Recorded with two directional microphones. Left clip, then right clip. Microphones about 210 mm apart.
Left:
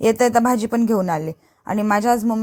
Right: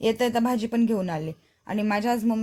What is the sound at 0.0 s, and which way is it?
A woman's voice, 25° left (ahead or behind).